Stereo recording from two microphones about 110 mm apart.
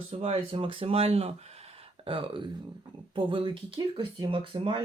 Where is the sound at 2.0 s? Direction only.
50° right (ahead or behind).